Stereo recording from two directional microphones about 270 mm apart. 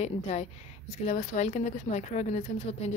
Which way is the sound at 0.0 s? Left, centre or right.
Left.